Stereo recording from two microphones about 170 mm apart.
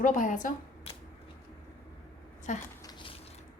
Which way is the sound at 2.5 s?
50° left (ahead or behind).